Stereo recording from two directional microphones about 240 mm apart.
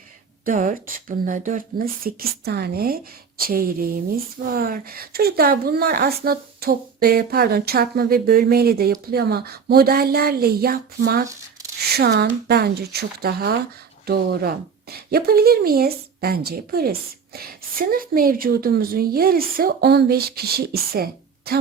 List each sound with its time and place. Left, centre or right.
0.4 s a woman's voice: right